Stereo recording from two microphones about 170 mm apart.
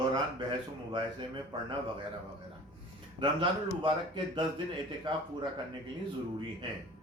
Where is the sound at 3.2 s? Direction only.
30° right (ahead or behind).